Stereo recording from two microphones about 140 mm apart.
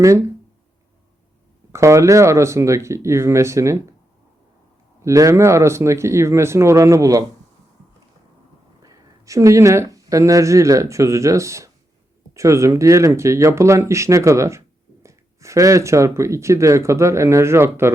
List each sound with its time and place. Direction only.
1.7 s speech: 20° right (ahead or behind)
5.0 s speech: 20° right (ahead or behind)
8.8 s speech: 25° right (ahead or behind)